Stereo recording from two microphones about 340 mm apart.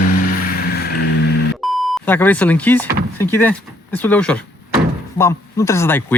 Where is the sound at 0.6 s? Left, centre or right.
Left.